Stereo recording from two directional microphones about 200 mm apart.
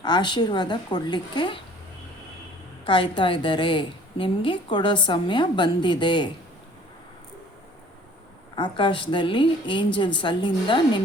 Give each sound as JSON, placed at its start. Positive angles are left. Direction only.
{"t": 0.0, "sound": "a woman's voice", "side_deg": 20}
{"t": 2.8, "sound": "a woman's voice", "side_deg": 25}
{"t": 8.5, "sound": "a woman's voice", "side_deg": 25}